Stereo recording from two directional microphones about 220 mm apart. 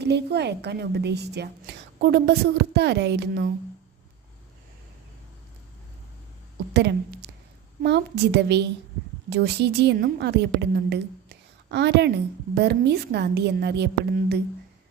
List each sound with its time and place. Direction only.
0.0 s a woman's voice: 50° right (ahead or behind)
6.7 s a woman's voice: 50° right (ahead or behind)